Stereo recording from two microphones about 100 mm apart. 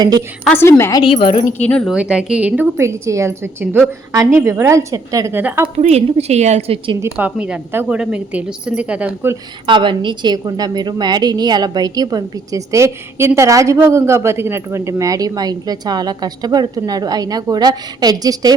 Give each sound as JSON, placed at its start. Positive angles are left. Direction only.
{"t": 0.5, "sound": "a woman's voice", "side_deg": 25}
{"t": 1.0, "sound": "speech", "side_deg": 65}
{"t": 1.6, "sound": "speech", "side_deg": 10}
{"t": 1.9, "sound": "speech", "side_deg": -10}
{"t": 2.7, "sound": "a woman's voice", "side_deg": -30}
{"t": 5.4, "sound": "speech", "side_deg": -15}
{"t": 5.7, "sound": "a woman's voice", "side_deg": -90}
{"t": 7.2, "sound": "speech", "side_deg": -10}
{"t": 9.6, "sound": "a woman's voice", "side_deg": -55}